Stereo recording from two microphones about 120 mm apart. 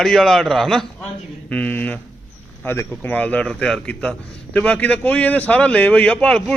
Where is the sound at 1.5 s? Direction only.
15° left (ahead or behind).